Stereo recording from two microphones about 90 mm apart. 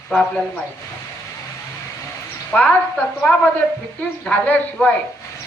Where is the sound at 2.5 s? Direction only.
15° left (ahead or behind).